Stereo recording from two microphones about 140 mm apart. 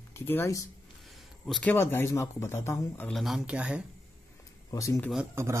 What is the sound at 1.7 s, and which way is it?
Speech, 15° left (ahead or behind).